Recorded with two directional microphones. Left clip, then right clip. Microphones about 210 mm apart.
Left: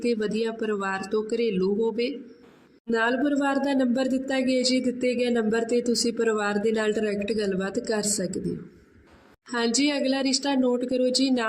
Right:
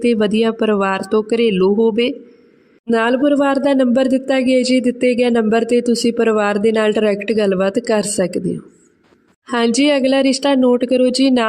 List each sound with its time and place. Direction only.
0.0 s speech: 45° right (ahead or behind)